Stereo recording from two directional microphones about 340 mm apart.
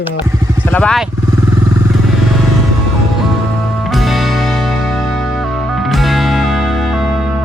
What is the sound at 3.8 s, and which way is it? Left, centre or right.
Music, centre.